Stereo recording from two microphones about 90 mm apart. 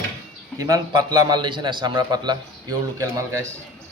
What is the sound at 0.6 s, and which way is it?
Speech, 40° right (ahead or behind).